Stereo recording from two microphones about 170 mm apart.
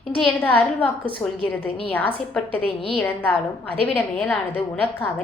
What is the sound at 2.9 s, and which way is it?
A woman's voice, 10° left (ahead or behind).